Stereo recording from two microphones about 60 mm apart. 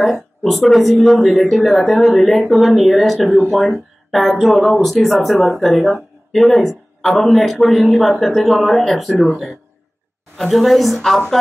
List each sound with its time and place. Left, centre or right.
0.0 s a man's voice: centre